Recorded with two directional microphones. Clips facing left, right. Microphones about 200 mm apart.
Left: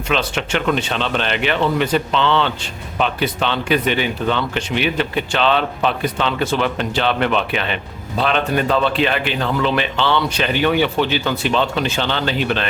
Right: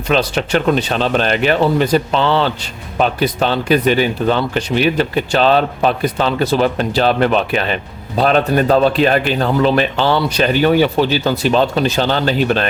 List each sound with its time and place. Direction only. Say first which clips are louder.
0.1 s speech: right 5 dB; 40° right (ahead or behind)